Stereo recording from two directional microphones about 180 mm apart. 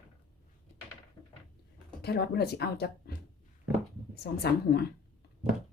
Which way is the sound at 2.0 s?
65° left (ahead or behind).